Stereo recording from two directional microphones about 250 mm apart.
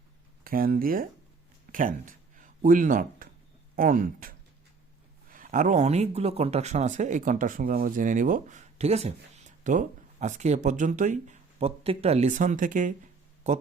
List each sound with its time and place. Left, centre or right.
0.4 s speech: right